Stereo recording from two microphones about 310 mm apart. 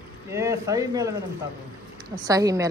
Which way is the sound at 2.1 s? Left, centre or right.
Centre.